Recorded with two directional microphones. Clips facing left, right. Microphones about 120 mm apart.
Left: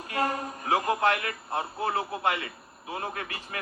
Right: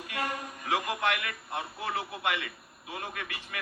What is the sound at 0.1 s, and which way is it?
A man's voice, 35° left (ahead or behind).